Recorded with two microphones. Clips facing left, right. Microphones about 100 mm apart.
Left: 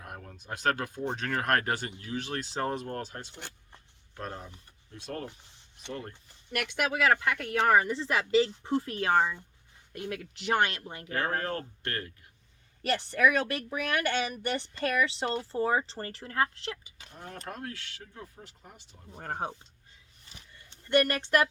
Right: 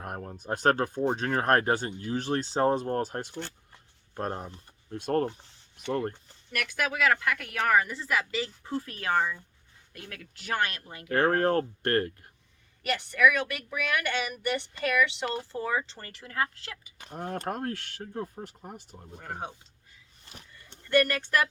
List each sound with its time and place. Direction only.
0.0 s a sound: 45° right (ahead or behind)
0.3 s speech: 35° right (ahead or behind)
6.5 s speech: 25° left (ahead or behind)
11.1 s speech: 40° right (ahead or behind)
12.8 s speech: 30° left (ahead or behind)
17.0 s speech: 50° right (ahead or behind)
19.2 s speech: 45° left (ahead or behind)
20.8 s speech: 25° left (ahead or behind)